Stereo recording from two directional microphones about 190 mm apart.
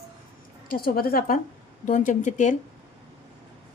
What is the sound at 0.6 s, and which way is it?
A woman's voice, 50° left (ahead or behind).